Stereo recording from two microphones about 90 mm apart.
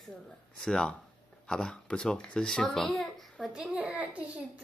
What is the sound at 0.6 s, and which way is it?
A child's voice, 5° left (ahead or behind).